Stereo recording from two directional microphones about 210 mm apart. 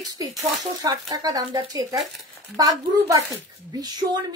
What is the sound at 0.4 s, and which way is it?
Speech, 15° right (ahead or behind).